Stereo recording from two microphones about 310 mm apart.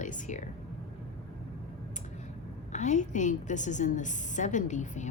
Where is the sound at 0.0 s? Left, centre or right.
Left.